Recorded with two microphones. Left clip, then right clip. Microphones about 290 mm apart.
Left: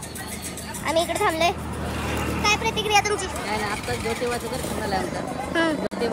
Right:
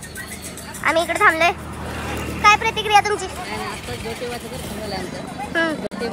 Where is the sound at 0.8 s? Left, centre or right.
Centre.